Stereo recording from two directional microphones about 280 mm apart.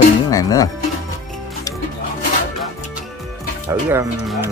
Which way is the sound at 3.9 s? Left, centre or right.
Centre.